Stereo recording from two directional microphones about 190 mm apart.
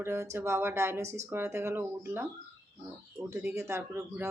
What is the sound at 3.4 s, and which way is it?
Speech, 15° right (ahead or behind).